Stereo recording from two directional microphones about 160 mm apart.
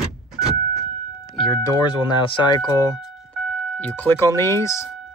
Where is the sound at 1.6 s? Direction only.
30° left (ahead or behind).